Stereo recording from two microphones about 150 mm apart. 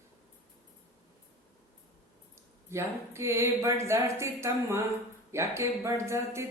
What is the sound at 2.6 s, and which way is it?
Speech, 20° right (ahead or behind).